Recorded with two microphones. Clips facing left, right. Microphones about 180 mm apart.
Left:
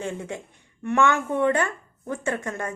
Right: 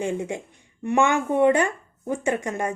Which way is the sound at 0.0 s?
15° right (ahead or behind).